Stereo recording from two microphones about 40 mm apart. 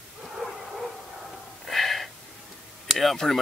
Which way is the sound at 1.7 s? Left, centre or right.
Centre.